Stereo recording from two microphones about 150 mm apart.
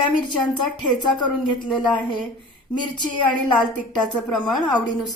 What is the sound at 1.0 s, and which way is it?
A woman's voice, 30° left (ahead or behind).